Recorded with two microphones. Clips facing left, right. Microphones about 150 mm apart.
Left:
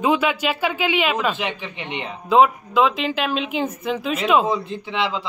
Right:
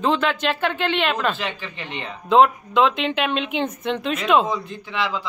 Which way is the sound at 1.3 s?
15° left (ahead or behind).